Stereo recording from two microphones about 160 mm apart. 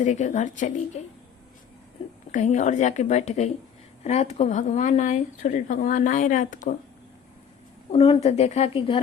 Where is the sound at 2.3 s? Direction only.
50° left (ahead or behind).